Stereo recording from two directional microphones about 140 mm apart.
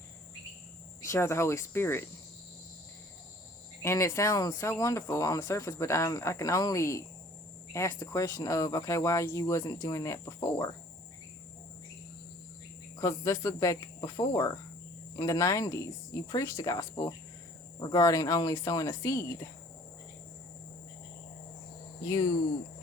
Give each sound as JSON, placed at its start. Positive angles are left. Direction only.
{"t": 1.0, "sound": "speech", "side_deg": 20}
{"t": 3.8, "sound": "speech", "side_deg": 20}
{"t": 13.0, "sound": "speech", "side_deg": 20}